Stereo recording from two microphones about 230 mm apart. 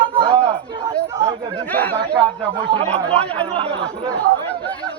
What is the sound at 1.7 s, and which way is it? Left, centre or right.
Speech, centre.